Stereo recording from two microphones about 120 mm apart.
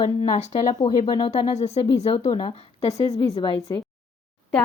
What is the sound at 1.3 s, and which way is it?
Speech, 65° left (ahead or behind).